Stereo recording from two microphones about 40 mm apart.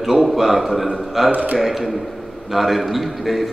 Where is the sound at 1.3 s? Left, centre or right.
Right.